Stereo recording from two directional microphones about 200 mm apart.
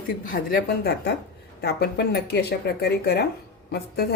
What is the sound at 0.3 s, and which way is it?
Speech, 45° left (ahead or behind).